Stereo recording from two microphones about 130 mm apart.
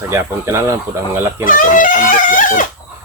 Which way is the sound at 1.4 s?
90° left.